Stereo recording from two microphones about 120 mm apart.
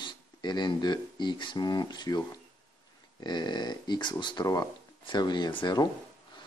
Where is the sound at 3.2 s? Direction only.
35° left (ahead or behind).